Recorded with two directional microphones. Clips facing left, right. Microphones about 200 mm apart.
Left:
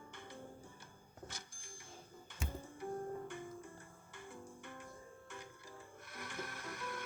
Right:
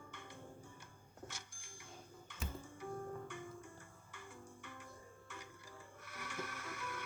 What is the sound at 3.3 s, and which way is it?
Music, 35° left (ahead or behind).